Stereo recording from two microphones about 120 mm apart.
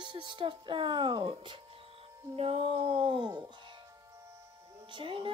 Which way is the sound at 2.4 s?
55° right (ahead or behind).